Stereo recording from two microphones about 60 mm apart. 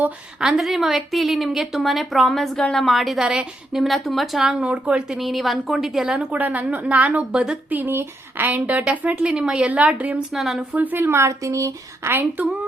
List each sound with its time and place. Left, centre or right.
0.3 s a woman's voice: centre
0.6 s a woman's voice: centre
3.2 s a woman's voice: centre
4.7 s a woman's voice: right
5.0 s a woman's voice: centre
6.1 s a woman's voice: right
10.2 s a woman's voice: centre
10.9 s a woman's voice: right
11.3 s speech: right
12.0 s a woman's voice: right